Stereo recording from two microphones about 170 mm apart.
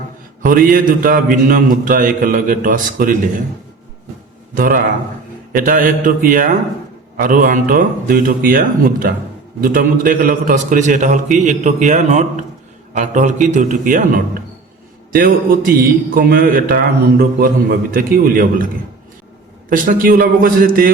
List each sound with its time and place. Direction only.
0.4 s a man's voice: 55° right (ahead or behind)
4.5 s a man's voice: 55° right (ahead or behind)
15.1 s a man's voice: 55° right (ahead or behind)
19.7 s a man's voice: 55° right (ahead or behind)